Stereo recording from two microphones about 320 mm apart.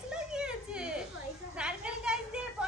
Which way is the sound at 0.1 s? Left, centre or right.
Centre.